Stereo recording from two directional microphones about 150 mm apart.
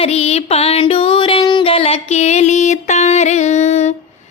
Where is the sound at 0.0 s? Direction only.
45° left (ahead or behind).